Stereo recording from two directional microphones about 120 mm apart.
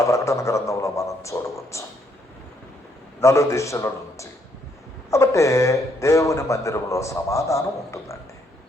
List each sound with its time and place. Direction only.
0.0 s a sound: 25° left (ahead or behind)
1.7 s speech: 25° left (ahead or behind)
3.2 s speech: 25° left (ahead or behind)